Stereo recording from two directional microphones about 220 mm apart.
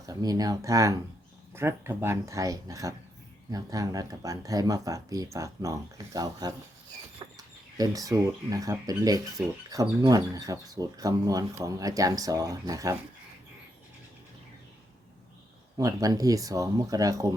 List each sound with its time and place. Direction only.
0.0 s speech: 15° right (ahead or behind)
15.8 s speech: 15° right (ahead or behind)